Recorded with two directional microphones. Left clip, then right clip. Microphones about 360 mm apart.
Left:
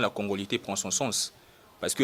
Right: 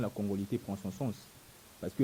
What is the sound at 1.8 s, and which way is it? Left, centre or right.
Speech, centre.